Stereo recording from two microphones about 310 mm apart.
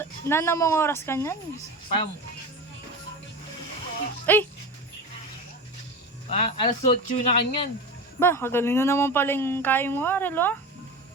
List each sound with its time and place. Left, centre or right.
0.0 s speech: centre
4.3 s speech: centre
6.3 s speech: left
8.2 s speech: centre